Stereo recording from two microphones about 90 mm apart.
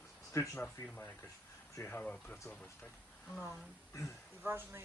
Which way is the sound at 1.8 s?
20° left (ahead or behind).